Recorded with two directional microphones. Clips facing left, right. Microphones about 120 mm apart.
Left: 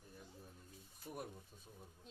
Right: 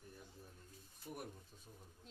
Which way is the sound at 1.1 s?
20° left (ahead or behind).